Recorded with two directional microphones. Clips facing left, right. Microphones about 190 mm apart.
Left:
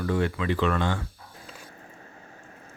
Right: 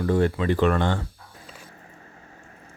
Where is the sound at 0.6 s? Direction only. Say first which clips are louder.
Right 4 dB; 50° right (ahead or behind).